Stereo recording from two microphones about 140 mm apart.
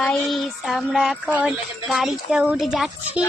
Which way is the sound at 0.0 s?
Centre (ahead or behind).